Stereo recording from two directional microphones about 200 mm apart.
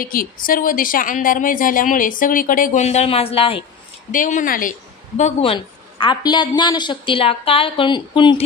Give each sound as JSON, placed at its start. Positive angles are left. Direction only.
{"t": 0.0, "sound": "a woman's voice", "side_deg": 45}
{"t": 4.1, "sound": "speech", "side_deg": 40}